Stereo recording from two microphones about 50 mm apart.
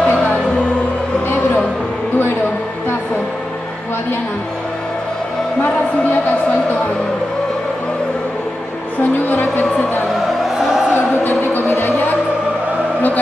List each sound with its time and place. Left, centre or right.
0.0 s music: left
9.0 s music: left
10.4 s music: centre
11.2 s music: left